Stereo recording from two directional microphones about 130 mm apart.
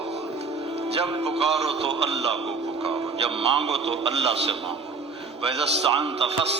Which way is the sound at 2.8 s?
50° right (ahead or behind).